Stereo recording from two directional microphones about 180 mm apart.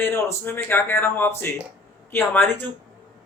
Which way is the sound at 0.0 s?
10° left (ahead or behind).